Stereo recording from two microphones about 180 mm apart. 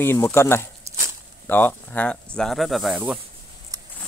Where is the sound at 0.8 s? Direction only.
15° right (ahead or behind).